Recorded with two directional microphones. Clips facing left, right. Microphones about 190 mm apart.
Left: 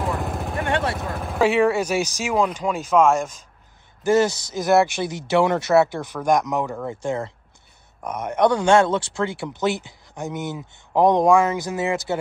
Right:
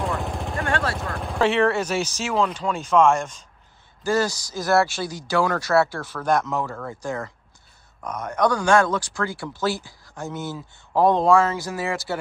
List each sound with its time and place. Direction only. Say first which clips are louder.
0.0 s vehicle: left 1 dB; centre (ahead or behind)
0.6 s vehicle: left 2 dB; 20° left (ahead or behind)
1.1 s speech: left 2 dB; 5° left (ahead or behind)
4.0 s speech: left 4 dB; 20° left (ahead or behind)